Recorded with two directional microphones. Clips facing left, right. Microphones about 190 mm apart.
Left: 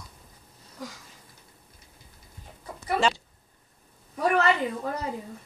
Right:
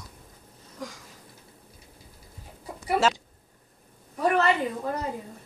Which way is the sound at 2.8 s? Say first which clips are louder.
Right 1 dB; 10° right (ahead or behind).